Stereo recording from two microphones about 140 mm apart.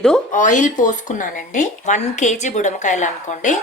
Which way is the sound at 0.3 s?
65° left (ahead or behind).